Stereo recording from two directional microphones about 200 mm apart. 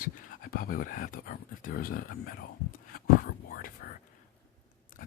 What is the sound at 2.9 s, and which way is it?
Whispering, 45° left (ahead or behind).